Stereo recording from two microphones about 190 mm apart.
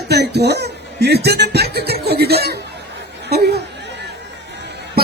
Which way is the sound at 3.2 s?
55° right (ahead or behind).